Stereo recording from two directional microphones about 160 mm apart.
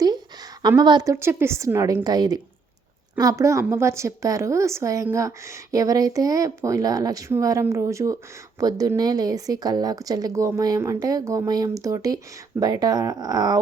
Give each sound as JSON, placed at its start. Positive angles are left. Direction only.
{"t": 0.8, "sound": "speech", "side_deg": -25}
{"t": 1.1, "sound": "speech", "side_deg": -15}